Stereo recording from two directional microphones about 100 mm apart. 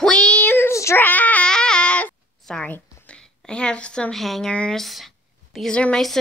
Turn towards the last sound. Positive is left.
turn(degrees=10)  # may be behind; listen again after turning